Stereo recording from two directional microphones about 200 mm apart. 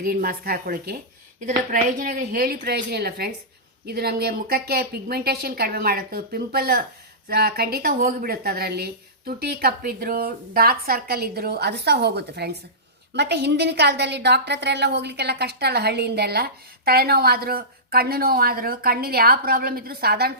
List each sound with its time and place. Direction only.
0.0 s a woman's voice: 50° right (ahead or behind)